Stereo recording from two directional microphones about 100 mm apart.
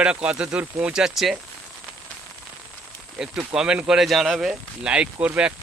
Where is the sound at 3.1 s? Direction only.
5° right (ahead or behind).